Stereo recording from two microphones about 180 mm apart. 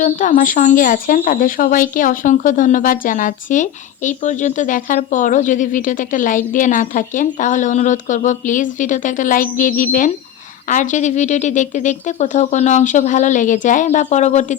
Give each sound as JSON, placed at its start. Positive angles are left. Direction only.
{"t": 0.0, "sound": "speech", "side_deg": 45}